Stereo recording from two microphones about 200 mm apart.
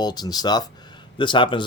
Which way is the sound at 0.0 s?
20° left (ahead or behind).